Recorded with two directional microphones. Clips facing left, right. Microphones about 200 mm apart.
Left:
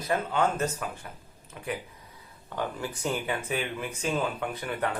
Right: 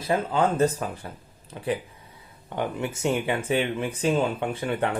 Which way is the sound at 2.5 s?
20° right (ahead or behind).